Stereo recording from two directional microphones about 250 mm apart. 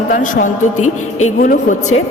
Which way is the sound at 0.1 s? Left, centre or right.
Left.